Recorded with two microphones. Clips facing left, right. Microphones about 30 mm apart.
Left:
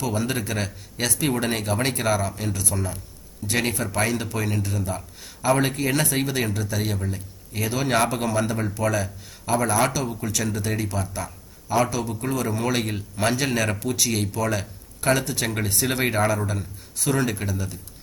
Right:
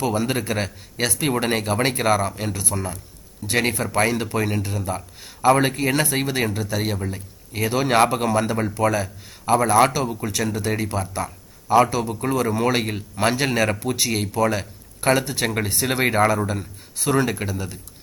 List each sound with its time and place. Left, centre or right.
0.0 s speech: right